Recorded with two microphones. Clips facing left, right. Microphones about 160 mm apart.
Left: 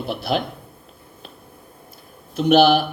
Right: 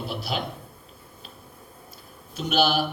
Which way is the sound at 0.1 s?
55° left (ahead or behind).